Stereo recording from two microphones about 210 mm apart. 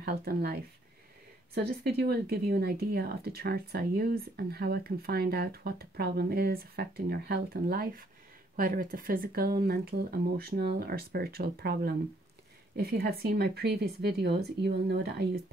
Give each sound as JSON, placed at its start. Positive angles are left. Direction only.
{"t": 0.0, "sound": "speech", "side_deg": -45}